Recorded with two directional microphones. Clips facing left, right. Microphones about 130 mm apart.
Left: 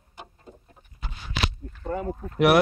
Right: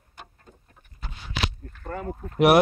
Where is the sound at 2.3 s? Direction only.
20° right (ahead or behind).